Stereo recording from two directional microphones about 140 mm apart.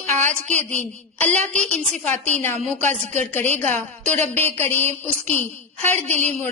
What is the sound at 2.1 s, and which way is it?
A woman's voice, 15° left (ahead or behind).